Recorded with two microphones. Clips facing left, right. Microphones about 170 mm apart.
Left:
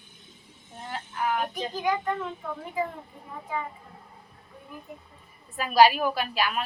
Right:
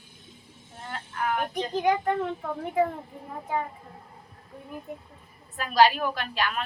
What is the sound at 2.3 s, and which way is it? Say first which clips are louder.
Speech: right 4 dB; 55° right (ahead or behind).